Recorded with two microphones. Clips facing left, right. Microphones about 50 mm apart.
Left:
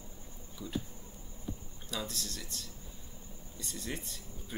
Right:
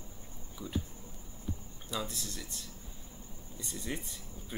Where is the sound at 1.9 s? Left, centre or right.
Centre.